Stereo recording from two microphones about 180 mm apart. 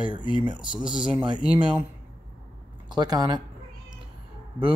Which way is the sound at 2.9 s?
20° right (ahead or behind).